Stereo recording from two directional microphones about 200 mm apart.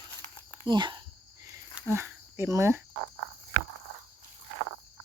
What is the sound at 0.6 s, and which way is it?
Cricket, 25° right (ahead or behind).